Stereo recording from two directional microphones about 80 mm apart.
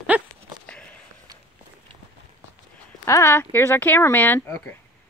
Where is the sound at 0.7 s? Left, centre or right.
Centre.